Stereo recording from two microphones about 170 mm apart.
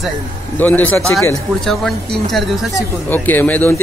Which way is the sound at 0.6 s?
10° left (ahead or behind).